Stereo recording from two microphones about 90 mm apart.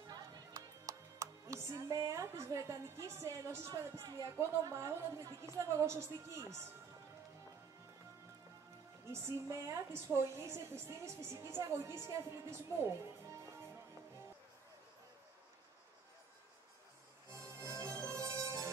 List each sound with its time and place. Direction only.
0.1 s speech: 40° right (ahead or behind)
9.0 s a woman's voice: 30° right (ahead or behind)
17.3 s music: 30° right (ahead or behind)